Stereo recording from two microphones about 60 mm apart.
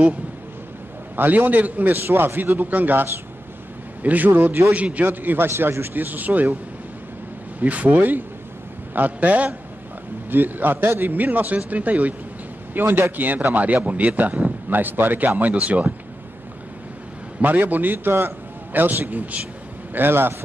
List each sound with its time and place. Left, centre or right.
1.1 s a man's voice: right
5.0 s a man's voice: right
7.6 s a man's voice: right
17.4 s a man's voice: right